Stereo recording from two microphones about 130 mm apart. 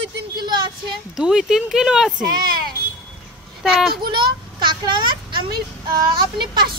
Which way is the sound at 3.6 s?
5° right (ahead or behind).